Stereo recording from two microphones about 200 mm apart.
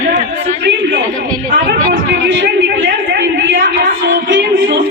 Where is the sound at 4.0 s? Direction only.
65° right (ahead or behind).